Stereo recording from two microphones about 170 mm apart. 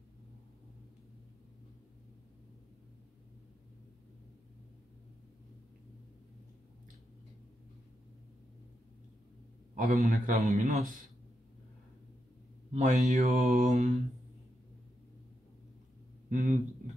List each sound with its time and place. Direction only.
9.8 s mantra: 55° right (ahead or behind)
12.7 s mantra: 50° right (ahead or behind)
16.3 s speech: 40° right (ahead or behind)